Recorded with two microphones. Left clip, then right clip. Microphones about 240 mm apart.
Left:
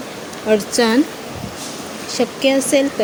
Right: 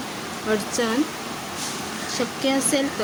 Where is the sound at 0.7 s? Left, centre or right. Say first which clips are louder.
Left 8 dB; left.